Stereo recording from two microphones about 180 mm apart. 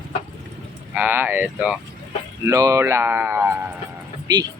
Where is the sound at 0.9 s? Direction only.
10° right (ahead or behind).